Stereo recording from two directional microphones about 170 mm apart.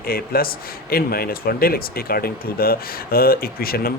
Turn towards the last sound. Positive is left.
turn(degrees=60)  # may be behind; listen again after turning